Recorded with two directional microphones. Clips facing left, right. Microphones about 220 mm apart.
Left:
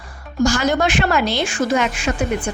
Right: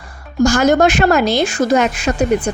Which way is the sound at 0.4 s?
45° right (ahead or behind).